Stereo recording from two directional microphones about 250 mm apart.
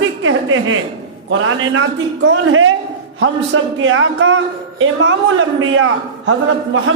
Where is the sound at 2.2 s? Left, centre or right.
Right.